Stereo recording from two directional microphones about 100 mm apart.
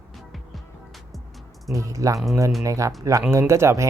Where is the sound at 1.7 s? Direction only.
35° right (ahead or behind).